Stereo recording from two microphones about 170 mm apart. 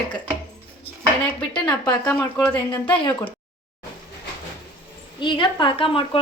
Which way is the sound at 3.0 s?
30° left (ahead or behind).